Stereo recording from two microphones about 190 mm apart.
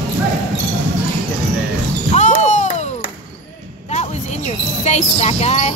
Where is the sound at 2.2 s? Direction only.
40° left (ahead or behind).